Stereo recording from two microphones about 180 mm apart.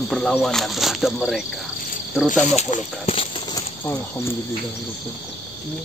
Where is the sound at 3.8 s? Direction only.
15° left (ahead or behind).